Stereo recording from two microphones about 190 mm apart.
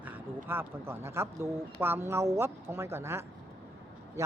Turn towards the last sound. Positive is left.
turn(degrees=-15)  # may be behind; listen again after turning